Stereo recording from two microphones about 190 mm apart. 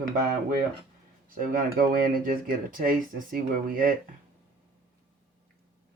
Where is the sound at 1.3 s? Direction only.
45° right (ahead or behind).